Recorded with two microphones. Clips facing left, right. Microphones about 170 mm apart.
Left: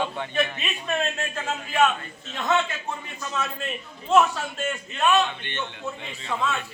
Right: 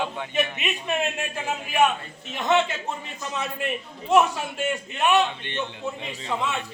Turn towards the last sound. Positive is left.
turn(degrees=-15)  # may be behind; listen again after turning